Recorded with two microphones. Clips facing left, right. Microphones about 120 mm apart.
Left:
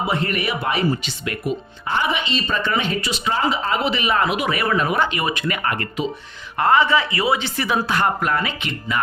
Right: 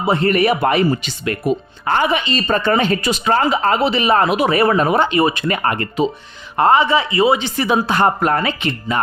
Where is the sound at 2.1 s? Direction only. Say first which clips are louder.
Right 5 dB; 45° right (ahead or behind); by 3.7 s 60° right (ahead or behind).